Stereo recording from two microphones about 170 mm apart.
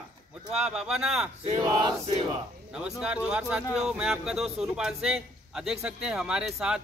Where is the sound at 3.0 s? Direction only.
5° right (ahead or behind).